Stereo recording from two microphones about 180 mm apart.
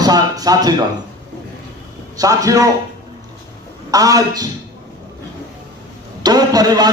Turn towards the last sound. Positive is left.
turn(degrees=-20)  # may be behind; listen again after turning